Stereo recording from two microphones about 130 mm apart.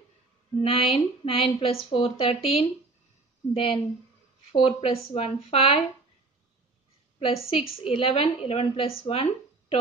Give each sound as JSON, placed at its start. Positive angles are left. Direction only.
{"t": 0.6, "sound": "speech", "side_deg": 45}
{"t": 7.2, "sound": "speech", "side_deg": 45}